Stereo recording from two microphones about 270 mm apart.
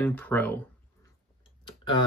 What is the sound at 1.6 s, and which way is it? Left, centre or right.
Tick-tock, centre.